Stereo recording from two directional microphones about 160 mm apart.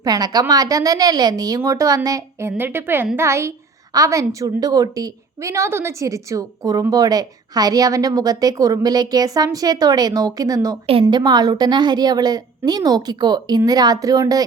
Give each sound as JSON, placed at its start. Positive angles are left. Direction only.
{"t": 0.0, "sound": "a woman's voice", "side_deg": -25}